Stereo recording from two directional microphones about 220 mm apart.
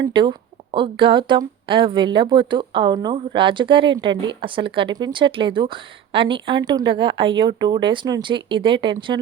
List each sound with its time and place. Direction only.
0.0 s speech: 20° right (ahead or behind)